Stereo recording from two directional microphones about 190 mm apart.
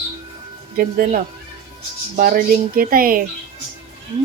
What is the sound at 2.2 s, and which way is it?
Speech, 50° right (ahead or behind).